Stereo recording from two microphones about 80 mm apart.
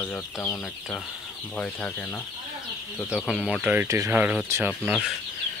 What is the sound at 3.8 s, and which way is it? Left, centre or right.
Speech, right.